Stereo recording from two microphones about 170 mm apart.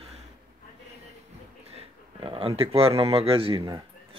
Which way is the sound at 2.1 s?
30° right (ahead or behind).